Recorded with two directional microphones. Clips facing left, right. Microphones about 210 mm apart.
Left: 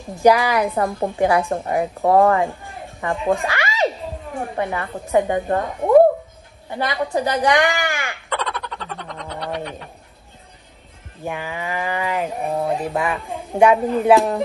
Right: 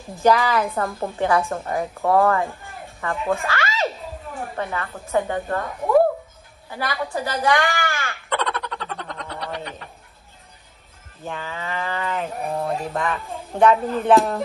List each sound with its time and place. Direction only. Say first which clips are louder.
0.2 s speech: left 3 dB; 15° left (ahead or behind)
0.8 s speech: left 4 dB; 30° left (ahead or behind)
1.1 s speech: left 2 dB; 15° left (ahead or behind)
2.0 s speech: left 3 dB; 30° left (ahead or behind)
3.0 s speech: left 3 dB; 15° left (ahead or behind)
3.3 s a sound: left 3 dB; 15° left (ahead or behind)
4.6 s a woman's voice: left 4 dB; 15° left (ahead or behind)
8.3 s a sound: right 2 dB; centre (ahead or behind)
11.2 s speech: left 4 dB; 15° left (ahead or behind)
12.4 s a woman's voice: left 3 dB; centre (ahead or behind)
13.9 s speech: left 2 dB; centre (ahead or behind)